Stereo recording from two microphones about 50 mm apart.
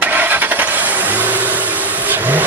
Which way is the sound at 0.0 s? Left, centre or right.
Right.